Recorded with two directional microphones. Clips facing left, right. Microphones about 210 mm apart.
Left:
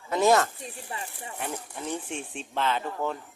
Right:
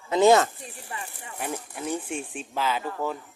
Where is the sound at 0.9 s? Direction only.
30° left (ahead or behind).